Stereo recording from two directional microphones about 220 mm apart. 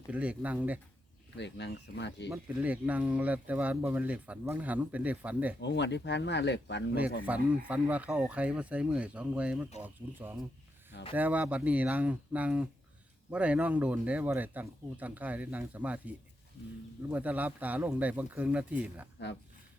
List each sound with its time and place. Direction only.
0.1 s speech: 5° right (ahead or behind)
1.4 s speech: 50° left (ahead or behind)
2.3 s speech: 5° right (ahead or behind)
5.5 s speech: 50° left (ahead or behind)
7.3 s speech: 5° right (ahead or behind)